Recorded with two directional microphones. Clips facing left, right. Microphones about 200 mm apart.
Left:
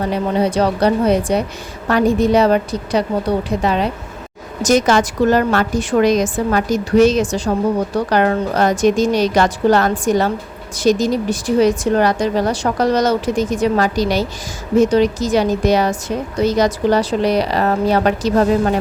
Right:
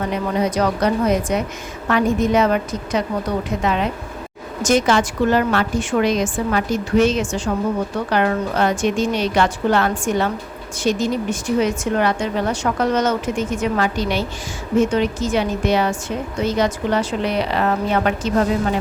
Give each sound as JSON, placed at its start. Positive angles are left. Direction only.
{"t": 0.0, "sound": "a woman's voice", "side_deg": 30}